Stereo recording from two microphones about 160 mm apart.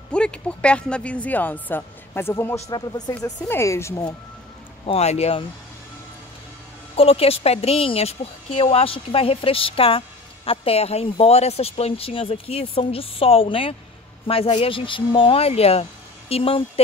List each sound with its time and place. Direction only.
0.1 s speech: 5° left (ahead or behind)
4.8 s a woman's voice: 40° left (ahead or behind)
7.0 s a woman's voice: 35° left (ahead or behind)